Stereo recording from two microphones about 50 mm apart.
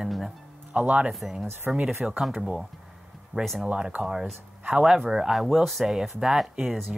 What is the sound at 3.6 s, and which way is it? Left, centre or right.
Speech, centre.